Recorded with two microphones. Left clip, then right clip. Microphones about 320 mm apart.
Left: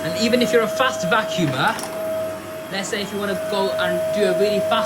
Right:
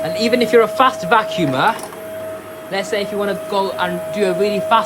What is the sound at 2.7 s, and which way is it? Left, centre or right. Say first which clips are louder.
Speech: right 7 dB; centre.